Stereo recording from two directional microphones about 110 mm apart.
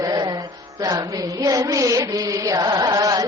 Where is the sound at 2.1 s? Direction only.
30° right (ahead or behind).